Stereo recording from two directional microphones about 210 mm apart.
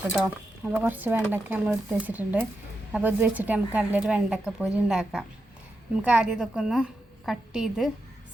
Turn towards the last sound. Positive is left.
turn(degrees=0)  # may be behind; listen again after turning